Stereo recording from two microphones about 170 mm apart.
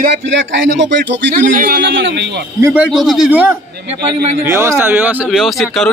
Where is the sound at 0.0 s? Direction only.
90° right.